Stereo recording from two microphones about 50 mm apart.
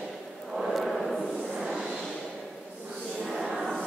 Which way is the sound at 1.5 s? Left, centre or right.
Centre.